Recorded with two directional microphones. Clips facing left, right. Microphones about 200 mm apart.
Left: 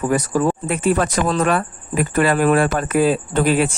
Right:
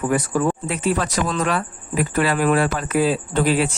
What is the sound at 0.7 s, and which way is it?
Speech, 55° left (ahead or behind).